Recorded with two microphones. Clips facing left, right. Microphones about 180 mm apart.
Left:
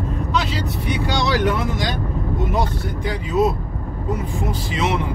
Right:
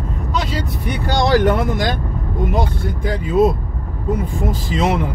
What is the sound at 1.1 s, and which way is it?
Speech, 50° right (ahead or behind).